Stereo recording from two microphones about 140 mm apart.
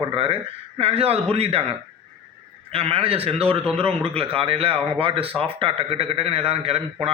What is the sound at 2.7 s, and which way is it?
A man's voice, 45° right (ahead or behind).